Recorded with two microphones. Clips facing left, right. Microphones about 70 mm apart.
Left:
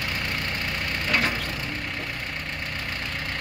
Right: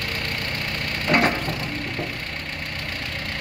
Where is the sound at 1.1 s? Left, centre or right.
Right.